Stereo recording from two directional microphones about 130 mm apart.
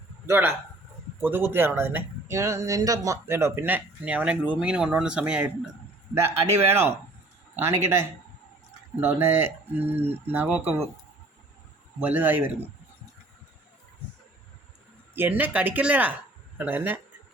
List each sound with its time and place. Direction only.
0.3 s speech: 15° right (ahead or behind)
6.1 s speech: 20° right (ahead or behind)
11.9 s speech: 15° right (ahead or behind)
15.1 s speech: 15° right (ahead or behind)